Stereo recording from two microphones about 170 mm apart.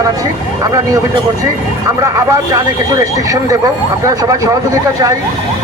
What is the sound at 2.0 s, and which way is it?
Speech, 20° right (ahead or behind).